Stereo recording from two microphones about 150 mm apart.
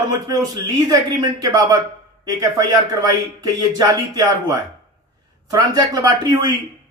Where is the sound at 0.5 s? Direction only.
25° right (ahead or behind).